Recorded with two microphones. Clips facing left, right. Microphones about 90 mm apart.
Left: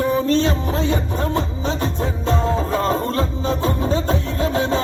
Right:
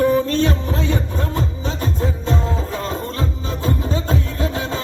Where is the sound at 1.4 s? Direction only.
35° left (ahead or behind).